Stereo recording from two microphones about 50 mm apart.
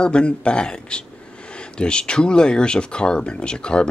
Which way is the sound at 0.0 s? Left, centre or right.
Centre.